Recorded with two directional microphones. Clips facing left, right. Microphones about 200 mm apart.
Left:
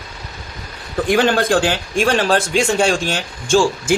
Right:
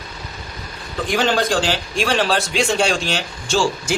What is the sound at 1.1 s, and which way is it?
A man's voice, 55° left (ahead or behind).